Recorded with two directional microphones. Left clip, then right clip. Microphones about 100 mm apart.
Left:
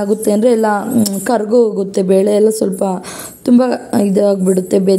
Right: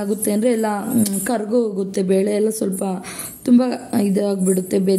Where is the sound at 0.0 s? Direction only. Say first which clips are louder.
Left 7 dB; 25° left (ahead or behind).